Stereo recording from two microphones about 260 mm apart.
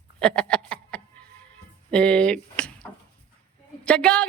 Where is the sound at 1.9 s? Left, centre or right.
Centre.